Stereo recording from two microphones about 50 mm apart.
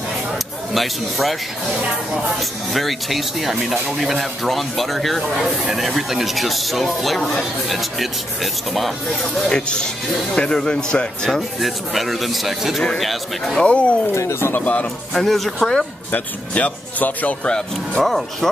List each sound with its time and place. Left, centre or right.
0.7 s speech: centre
2.7 s speech: centre
9.2 s speech: centre
11.2 s speech: centre
13.6 s speech: left
15.1 s speech: centre
16.1 s speech: left
17.5 s speech: centre
18.0 s speech: centre